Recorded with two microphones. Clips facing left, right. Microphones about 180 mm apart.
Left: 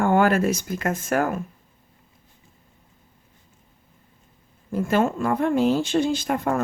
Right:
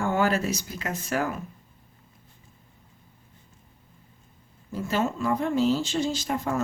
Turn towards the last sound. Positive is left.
turn(degrees=55)  # may be behind; listen again after turning